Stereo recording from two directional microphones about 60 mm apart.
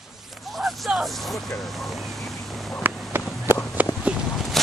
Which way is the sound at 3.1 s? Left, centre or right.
Right.